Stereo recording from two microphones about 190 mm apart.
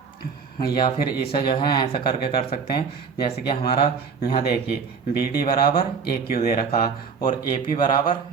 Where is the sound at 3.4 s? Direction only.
50° left (ahead or behind).